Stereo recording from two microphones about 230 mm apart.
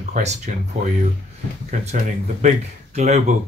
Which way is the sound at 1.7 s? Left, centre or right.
Right.